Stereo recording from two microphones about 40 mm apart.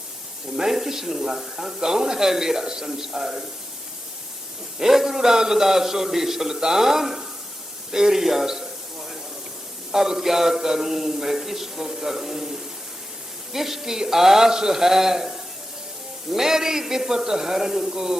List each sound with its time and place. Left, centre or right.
0.5 s a man's voice: centre
4.8 s a man's voice: centre
7.9 s a sound: centre
9.9 s a man's voice: centre